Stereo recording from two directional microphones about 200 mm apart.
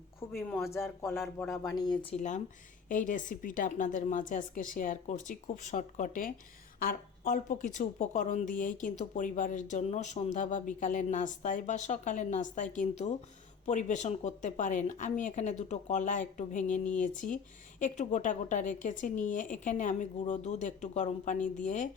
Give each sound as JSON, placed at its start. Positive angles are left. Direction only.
{"t": 0.3, "sound": "a man's voice", "side_deg": 15}
{"t": 1.1, "sound": "speech", "side_deg": 0}
{"t": 1.5, "sound": "a woman's voice", "side_deg": 20}